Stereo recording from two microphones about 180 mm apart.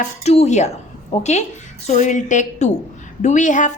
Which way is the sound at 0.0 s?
35° left (ahead or behind).